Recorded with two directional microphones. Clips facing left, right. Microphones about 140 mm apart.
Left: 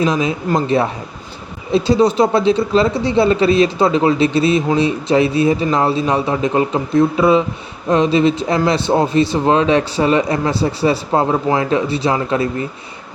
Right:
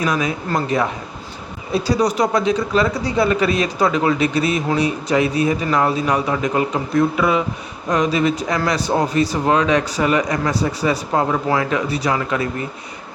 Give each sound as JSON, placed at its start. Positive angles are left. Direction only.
{"t": 0.0, "sound": "a man's voice", "side_deg": 25}